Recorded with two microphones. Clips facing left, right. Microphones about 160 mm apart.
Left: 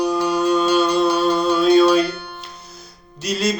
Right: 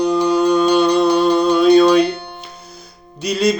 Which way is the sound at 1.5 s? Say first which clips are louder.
Right 3 dB; 5° left (ahead or behind).